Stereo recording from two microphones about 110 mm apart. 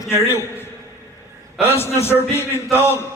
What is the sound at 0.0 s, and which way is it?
Speech, 20° left (ahead or behind).